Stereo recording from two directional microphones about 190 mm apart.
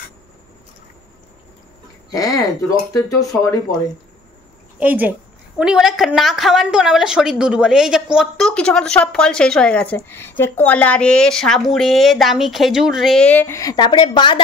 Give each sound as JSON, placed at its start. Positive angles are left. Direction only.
{"t": 2.0, "sound": "speech", "side_deg": 20}
{"t": 4.7, "sound": "a woman's voice", "side_deg": -10}